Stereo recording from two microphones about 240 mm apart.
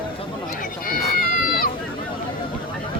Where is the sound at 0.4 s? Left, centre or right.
Left.